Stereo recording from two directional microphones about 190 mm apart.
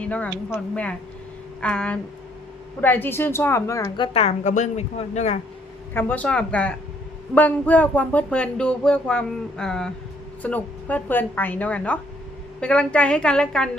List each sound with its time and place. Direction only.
0.0 s a woman's voice: 5° left (ahead or behind); by 5.4 s 35° left (ahead or behind)
5.9 s a woman's voice: 10° left (ahead or behind)